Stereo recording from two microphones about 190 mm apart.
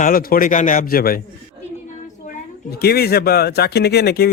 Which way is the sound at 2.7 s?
55° left (ahead or behind).